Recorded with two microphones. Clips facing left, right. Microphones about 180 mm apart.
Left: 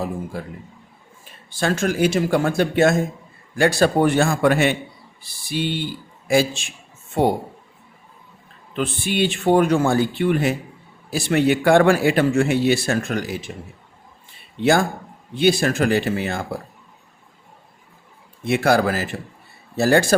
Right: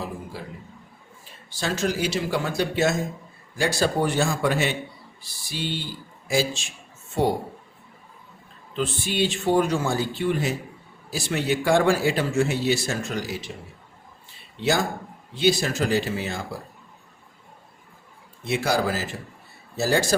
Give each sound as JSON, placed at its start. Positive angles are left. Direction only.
{"t": 0.3, "sound": "speech", "side_deg": 50}
{"t": 8.7, "sound": "speech", "side_deg": 60}
{"t": 14.6, "sound": "speech", "side_deg": 55}
{"t": 18.4, "sound": "speech", "side_deg": 60}